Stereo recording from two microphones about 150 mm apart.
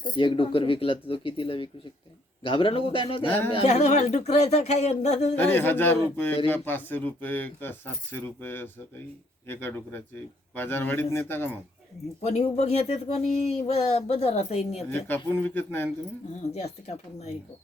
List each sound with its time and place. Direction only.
0.0 s speech: 35° left (ahead or behind)
3.2 s speech: 10° left (ahead or behind)
3.5 s speech: 45° left (ahead or behind)
5.4 s speech: 15° left (ahead or behind)
12.2 s speech: 45° left (ahead or behind)
14.8 s speech: 15° left (ahead or behind)
16.6 s speech: 50° left (ahead or behind)